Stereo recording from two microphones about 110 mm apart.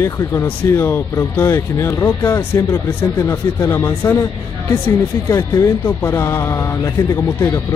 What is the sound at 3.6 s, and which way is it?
Speech, 25° left (ahead or behind).